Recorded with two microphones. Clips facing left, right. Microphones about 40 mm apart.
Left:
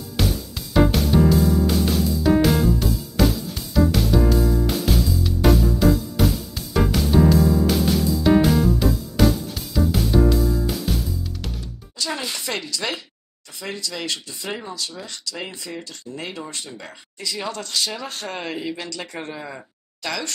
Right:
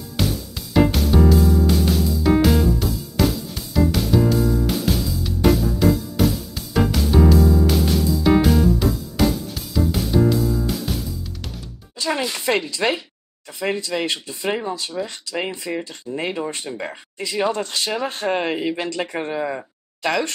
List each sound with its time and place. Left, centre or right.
0.2 s music: centre
12.0 s music: right
12.4 s speech: right
20.0 s speech: right